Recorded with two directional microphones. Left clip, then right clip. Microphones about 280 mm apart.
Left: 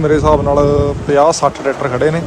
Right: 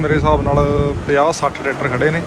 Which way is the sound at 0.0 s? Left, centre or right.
Centre.